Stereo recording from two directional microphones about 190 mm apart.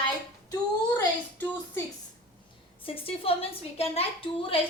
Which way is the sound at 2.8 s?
30° left (ahead or behind).